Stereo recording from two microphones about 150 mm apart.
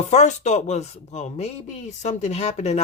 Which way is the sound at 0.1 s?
50° left (ahead or behind).